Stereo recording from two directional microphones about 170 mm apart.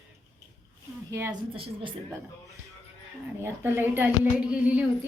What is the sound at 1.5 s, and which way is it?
Speech, 30° right (ahead or behind).